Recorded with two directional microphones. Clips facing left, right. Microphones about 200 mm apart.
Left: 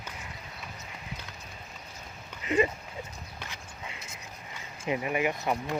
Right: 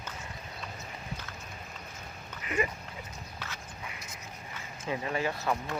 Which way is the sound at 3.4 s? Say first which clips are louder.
Even; 20° left (ahead or behind).